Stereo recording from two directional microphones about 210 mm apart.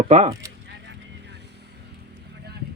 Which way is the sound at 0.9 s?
55° right (ahead or behind).